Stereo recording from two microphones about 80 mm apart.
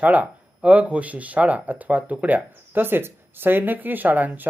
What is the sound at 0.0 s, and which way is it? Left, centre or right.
Speech, centre.